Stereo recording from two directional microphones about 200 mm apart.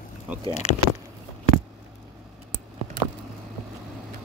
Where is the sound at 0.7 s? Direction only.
35° left (ahead or behind).